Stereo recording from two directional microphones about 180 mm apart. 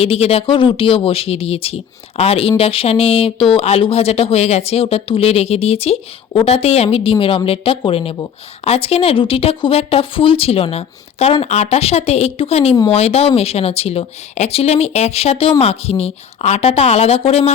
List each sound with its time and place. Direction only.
0.0 s speech: 35° left (ahead or behind)